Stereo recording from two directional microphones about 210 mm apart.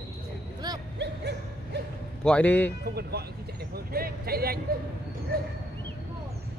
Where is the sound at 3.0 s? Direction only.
50° right (ahead or behind).